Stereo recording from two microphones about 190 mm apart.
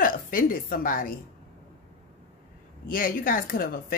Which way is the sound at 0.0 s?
45° left (ahead or behind).